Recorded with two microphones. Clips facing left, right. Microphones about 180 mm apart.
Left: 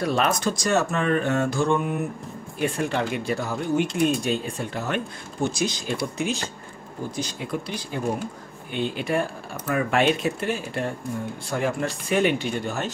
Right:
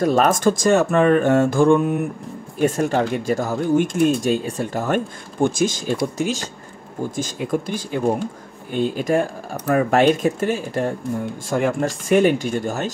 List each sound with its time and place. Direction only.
0.0 s speech: 45° right (ahead or behind)